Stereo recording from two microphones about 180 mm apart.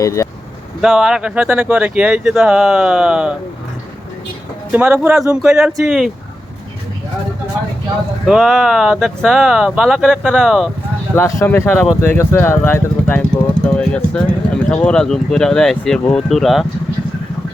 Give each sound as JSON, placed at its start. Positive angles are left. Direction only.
{"t": 0.0, "sound": "speech", "side_deg": 15}
{"t": 0.8, "sound": "speech", "side_deg": -5}
{"t": 4.7, "sound": "speech", "side_deg": -10}
{"t": 8.3, "sound": "speech", "side_deg": 0}
{"t": 11.1, "sound": "speech", "side_deg": 15}